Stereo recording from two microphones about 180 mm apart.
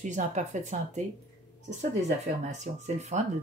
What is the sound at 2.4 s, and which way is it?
Speech, 40° right (ahead or behind).